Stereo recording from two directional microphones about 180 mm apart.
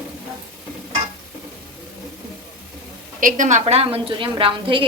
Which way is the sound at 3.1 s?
45° right (ahead or behind).